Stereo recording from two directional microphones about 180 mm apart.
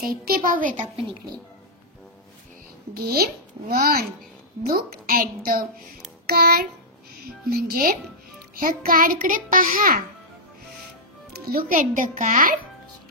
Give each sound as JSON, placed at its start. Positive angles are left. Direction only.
{"t": 0.0, "sound": "a child's voice", "side_deg": -55}
{"t": 0.9, "sound": "a woman's voice", "side_deg": -25}
{"t": 2.9, "sound": "a child's voice", "side_deg": -60}
{"t": 6.2, "sound": "child singing", "side_deg": -55}
{"t": 7.4, "sound": "a child's voice", "side_deg": -55}
{"t": 11.5, "sound": "a child's voice", "side_deg": -50}